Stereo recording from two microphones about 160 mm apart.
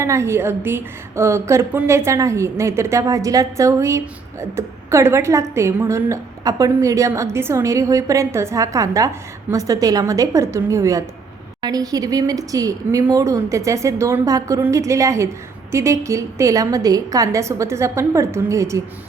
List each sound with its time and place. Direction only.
0.0 s a woman's voice: 15° right (ahead or behind)